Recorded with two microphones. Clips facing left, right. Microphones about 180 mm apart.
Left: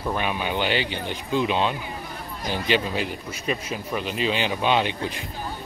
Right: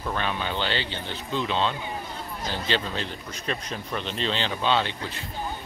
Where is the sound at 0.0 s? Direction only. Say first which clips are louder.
Left 3 dB; 15° left (ahead or behind).